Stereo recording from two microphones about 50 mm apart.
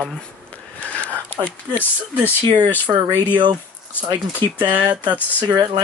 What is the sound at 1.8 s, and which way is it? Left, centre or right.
Speech, left.